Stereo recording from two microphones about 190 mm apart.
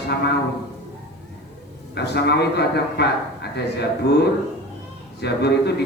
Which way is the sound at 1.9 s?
60° left (ahead or behind).